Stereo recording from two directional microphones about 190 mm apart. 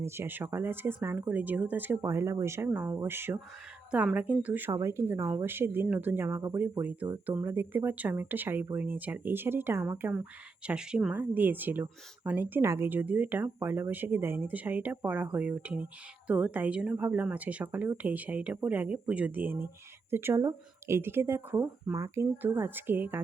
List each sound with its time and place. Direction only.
0.0 s speech: 10° right (ahead or behind)